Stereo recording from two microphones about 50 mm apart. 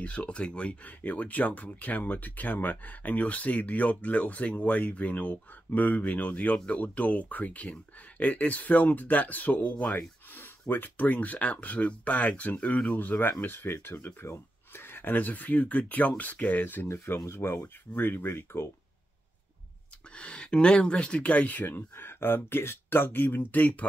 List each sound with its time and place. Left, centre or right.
0.0 s speech: left
16.8 s speech: left
20.2 s speech: left